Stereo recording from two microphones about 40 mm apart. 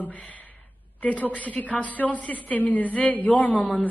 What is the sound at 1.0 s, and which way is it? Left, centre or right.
A woman's voice, left.